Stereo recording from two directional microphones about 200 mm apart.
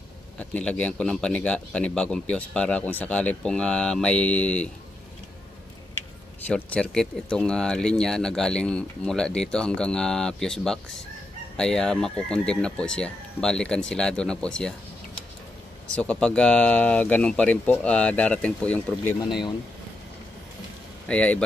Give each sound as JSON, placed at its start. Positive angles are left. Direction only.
{"t": 0.4, "sound": "speech", "side_deg": 5}
{"t": 6.4, "sound": "speech", "side_deg": 5}
{"t": 15.9, "sound": "speech", "side_deg": 5}
{"t": 21.1, "sound": "speech", "side_deg": 5}